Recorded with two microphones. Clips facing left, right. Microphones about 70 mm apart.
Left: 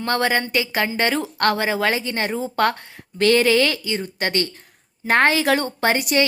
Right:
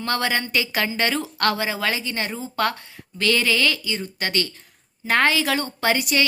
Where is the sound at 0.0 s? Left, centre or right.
Left.